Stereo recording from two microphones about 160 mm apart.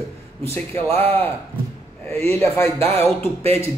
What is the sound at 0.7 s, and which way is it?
Speech, 40° right (ahead or behind).